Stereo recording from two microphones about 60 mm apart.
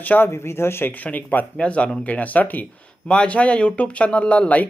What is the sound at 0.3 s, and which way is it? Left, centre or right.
Speech, left.